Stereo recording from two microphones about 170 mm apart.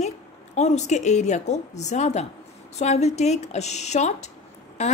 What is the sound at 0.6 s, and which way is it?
A woman's voice, 40° left (ahead or behind).